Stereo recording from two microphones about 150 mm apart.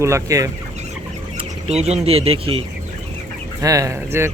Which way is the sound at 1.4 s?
45° right (ahead or behind).